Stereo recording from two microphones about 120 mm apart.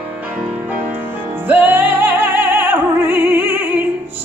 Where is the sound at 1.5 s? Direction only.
15° right (ahead or behind).